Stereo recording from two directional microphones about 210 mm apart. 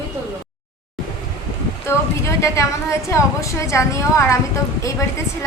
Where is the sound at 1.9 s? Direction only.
10° left (ahead or behind).